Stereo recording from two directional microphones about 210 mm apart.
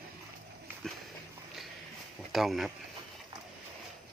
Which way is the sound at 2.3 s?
Centre (ahead or behind).